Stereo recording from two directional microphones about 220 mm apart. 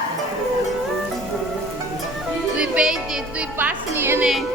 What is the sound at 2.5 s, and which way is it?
Music, 5° right (ahead or behind).